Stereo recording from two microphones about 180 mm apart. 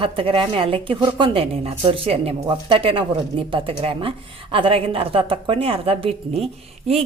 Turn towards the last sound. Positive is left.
turn(degrees=-35)  # may be behind; listen again after turning